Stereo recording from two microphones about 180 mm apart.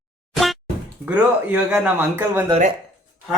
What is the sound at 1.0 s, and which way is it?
Speech, 10° right (ahead or behind).